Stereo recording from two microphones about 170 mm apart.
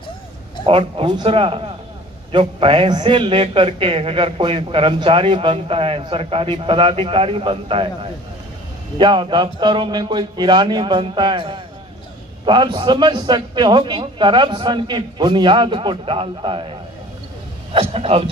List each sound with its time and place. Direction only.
0.6 s a man's voice: 30° right (ahead or behind)
17.7 s a man's voice: 35° right (ahead or behind)